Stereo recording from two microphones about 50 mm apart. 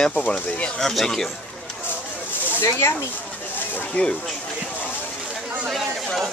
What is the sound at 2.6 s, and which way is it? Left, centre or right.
Speech, left.